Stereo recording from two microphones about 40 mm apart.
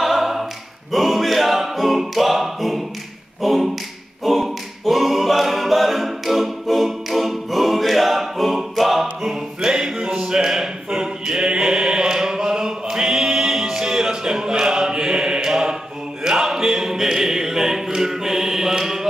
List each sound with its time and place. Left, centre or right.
0.0 s a capella: centre
3.4 s tap: centre
4.2 s a capella: centre
9.2 s music: centre